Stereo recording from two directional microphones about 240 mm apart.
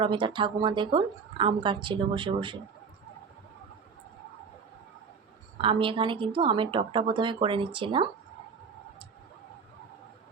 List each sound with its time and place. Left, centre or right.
0.0 s a woman's voice: centre
5.5 s a woman's voice: right